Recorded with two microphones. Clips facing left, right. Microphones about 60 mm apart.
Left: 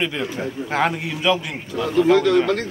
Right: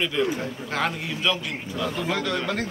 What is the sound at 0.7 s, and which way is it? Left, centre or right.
A man's voice, left.